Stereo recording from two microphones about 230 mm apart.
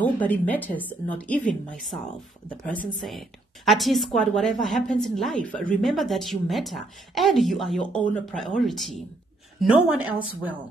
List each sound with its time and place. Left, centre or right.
0.0 s a woman's voice: centre
3.0 s a woman's voice: centre